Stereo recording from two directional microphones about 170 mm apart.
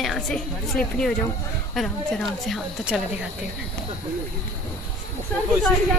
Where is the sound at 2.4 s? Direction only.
Centre (ahead or behind).